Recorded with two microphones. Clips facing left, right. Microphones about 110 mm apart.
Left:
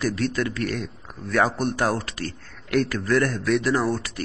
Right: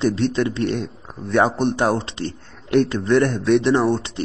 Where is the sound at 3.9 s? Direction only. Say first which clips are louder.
Right 5 dB; 25° right (ahead or behind).